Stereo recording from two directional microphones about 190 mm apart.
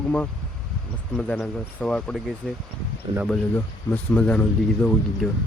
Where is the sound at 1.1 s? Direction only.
5° left (ahead or behind).